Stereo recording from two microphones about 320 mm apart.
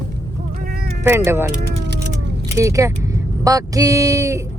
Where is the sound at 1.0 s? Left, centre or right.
Centre.